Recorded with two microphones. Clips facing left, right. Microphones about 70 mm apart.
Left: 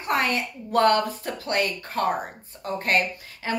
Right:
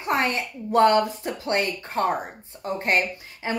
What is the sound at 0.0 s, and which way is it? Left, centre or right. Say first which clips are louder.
Speech: even; right.